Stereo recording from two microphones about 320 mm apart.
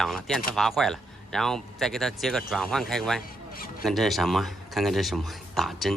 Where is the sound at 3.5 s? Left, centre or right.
Left.